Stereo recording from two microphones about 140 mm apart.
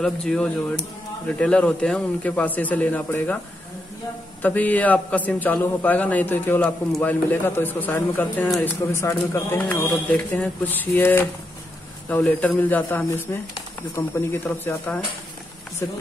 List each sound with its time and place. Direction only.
0.0 s speech: 5° left (ahead or behind)
4.4 s speech: 10° left (ahead or behind)